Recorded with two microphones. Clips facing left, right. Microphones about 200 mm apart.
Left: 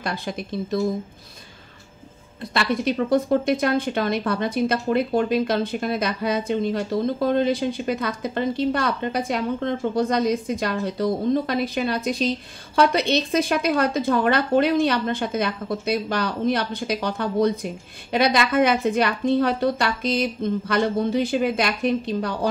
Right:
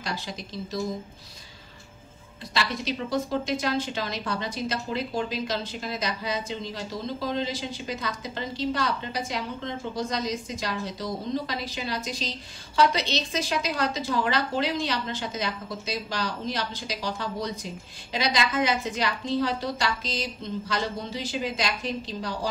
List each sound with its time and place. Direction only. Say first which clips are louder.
0.0 s a woman's voice: left 6 dB; 55° left (ahead or behind)
2.5 s a woman's voice: left 7 dB; 55° left (ahead or behind)